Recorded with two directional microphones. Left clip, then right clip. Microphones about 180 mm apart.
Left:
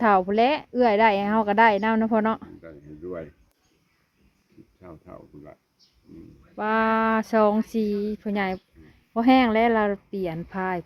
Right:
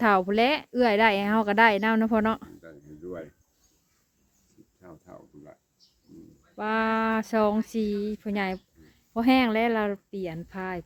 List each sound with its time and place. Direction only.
0.0 s a woman's voice: 35° right (ahead or behind)
2.6 s a sound: 15° right (ahead or behind)
4.8 s speech: 15° right (ahead or behind)
6.6 s music: 15° right (ahead or behind)
7.7 s speech: 20° right (ahead or behind)